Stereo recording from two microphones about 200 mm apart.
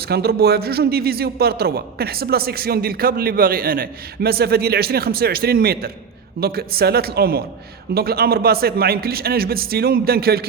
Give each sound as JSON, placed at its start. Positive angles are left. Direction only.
{"t": 0.1, "sound": "a man's voice", "side_deg": -50}